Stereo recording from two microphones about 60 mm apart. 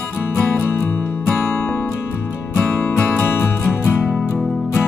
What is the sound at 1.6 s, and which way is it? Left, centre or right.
Music, left.